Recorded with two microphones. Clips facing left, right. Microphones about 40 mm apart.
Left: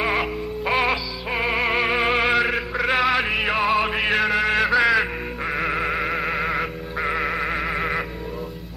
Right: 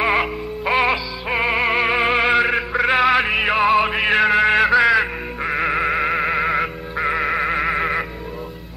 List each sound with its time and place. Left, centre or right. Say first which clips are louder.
0.0 s music: right 4 dB; centre